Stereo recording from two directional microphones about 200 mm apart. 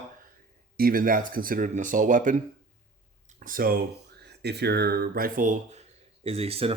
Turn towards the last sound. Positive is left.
turn(degrees=-30)  # may be behind; listen again after turning